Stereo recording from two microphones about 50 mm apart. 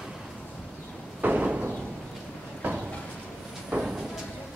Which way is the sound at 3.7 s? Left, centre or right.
Right.